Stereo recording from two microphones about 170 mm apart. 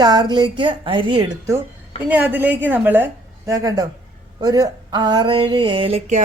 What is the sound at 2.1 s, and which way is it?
A woman's voice, 10° right (ahead or behind).